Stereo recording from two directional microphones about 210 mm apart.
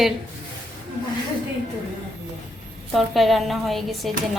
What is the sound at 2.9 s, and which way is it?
A woman's voice, centre (ahead or behind).